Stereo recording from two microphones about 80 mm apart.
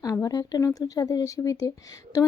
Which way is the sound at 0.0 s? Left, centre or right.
Left.